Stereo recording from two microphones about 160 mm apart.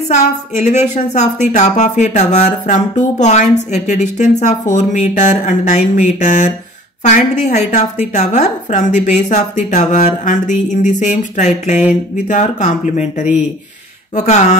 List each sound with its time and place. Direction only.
0.1 s a woman's voice: 45° left (ahead or behind)